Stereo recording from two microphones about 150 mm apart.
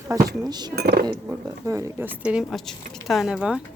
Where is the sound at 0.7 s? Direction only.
90° right.